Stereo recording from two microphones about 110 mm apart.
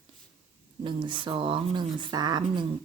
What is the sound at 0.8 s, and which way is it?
Speech, 45° right (ahead or behind).